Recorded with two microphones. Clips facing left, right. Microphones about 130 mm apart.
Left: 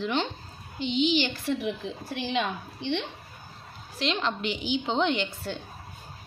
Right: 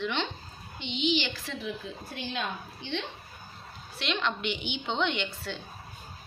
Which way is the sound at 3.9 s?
35° left (ahead or behind).